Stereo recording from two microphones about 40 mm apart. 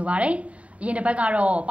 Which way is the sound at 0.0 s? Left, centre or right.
Right.